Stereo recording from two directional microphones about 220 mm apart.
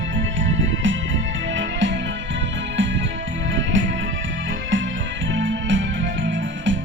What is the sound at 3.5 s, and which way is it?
Music, 55° right (ahead or behind).